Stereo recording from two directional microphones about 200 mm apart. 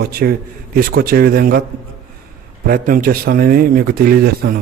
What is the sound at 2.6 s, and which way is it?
Speech, 45° right (ahead or behind).